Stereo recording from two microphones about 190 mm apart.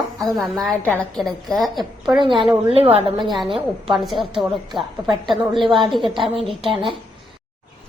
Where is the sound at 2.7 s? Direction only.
30° right (ahead or behind).